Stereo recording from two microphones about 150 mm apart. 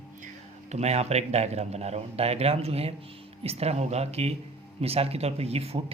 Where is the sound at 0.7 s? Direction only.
45° right (ahead or behind).